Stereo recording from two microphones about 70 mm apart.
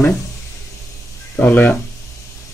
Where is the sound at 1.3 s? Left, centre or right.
Left.